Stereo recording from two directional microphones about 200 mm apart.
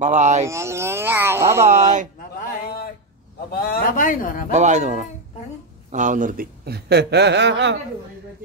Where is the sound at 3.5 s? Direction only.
50° left (ahead or behind).